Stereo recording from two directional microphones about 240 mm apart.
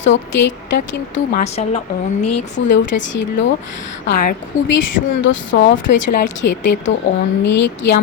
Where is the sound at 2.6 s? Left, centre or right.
Left.